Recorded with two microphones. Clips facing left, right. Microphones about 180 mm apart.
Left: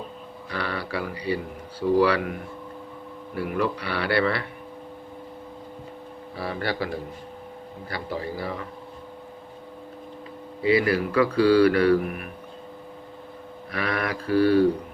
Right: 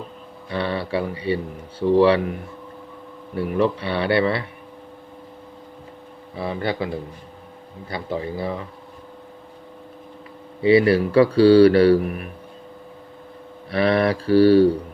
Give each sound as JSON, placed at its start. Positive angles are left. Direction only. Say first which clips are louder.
{"t": 0.5, "sound": "a man's voice", "louder": "right 6 dB", "side_deg": -25}
{"t": 3.3, "sound": "a man's voice", "louder": "right 5 dB", "side_deg": -25}
{"t": 6.3, "sound": "a man's voice", "louder": "right 4 dB", "side_deg": -20}
{"t": 10.6, "sound": "speech", "louder": "right 6 dB", "side_deg": -30}
{"t": 13.7, "sound": "speech", "louder": "right 9 dB", "side_deg": -30}